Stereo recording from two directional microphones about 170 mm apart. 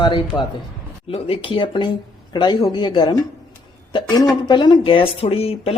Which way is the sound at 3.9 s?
25° left (ahead or behind).